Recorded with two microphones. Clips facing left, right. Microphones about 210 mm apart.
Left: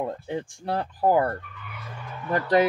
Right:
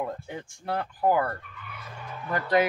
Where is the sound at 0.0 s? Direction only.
30° left (ahead or behind).